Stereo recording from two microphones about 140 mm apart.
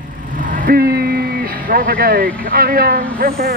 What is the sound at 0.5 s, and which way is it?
Speech, 80° right.